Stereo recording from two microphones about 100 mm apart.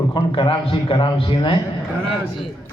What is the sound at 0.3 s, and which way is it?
A man's voice, 60° left (ahead or behind).